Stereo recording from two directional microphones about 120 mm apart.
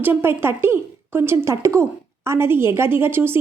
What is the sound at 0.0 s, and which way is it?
A woman's voice, 20° right (ahead or behind).